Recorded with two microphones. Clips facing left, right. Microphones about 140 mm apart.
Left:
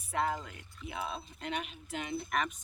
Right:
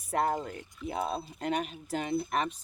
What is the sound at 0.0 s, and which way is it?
Speech, 45° right (ahead or behind).